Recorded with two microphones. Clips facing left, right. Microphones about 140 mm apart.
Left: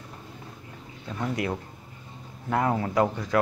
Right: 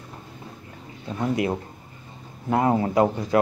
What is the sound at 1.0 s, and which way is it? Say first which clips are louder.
Speech: right 5 dB; 20° right (ahead or behind).